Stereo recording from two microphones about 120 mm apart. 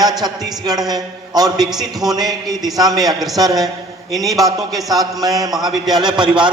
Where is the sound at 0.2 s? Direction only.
35° right (ahead or behind).